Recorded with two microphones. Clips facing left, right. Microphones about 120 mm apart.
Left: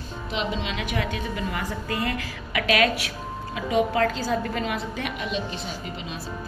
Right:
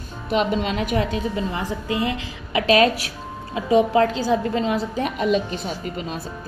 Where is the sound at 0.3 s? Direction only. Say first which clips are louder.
Right 8 dB; 50° right (ahead or behind).